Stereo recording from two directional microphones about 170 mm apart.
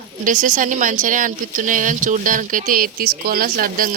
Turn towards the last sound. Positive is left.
turn(degrees=-55)  # may be behind; listen again after turning